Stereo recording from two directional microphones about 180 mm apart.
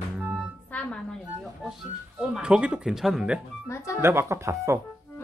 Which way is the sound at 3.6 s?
15° left (ahead or behind).